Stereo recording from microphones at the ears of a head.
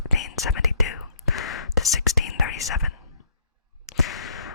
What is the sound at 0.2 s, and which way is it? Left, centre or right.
Whispering, left.